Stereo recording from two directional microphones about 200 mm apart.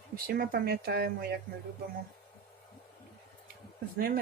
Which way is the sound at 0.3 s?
50° right (ahead or behind).